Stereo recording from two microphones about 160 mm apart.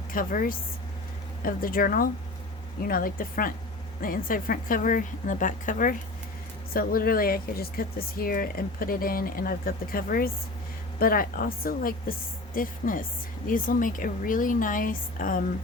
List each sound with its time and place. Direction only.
0.1 s speech: 60° left (ahead or behind)